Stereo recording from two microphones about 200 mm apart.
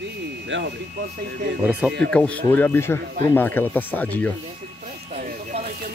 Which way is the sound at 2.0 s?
5° left (ahead or behind).